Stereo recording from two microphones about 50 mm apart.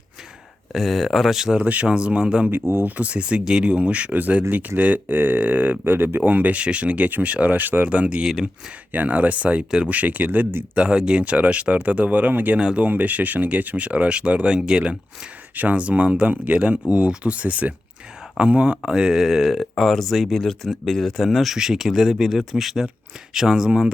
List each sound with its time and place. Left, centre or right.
0.7 s speech: centre
1.6 s speech: right
2.5 s speech: right
2.8 s speech: right
7.9 s speech: right
8.9 s speech: right
10.8 s speech: centre
12.3 s speech: right
12.5 s speech: centre
12.8 s speech: right; by 14.9 s centre
15.5 s speech: right; by 23.9 s centre